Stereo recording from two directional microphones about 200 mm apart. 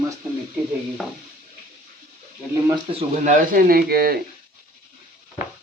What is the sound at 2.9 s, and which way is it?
Speech, 40° right (ahead or behind).